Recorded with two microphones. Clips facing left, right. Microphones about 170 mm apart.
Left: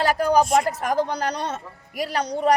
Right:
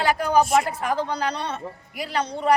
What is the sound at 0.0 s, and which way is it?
A woman's voice, 40° left (ahead or behind).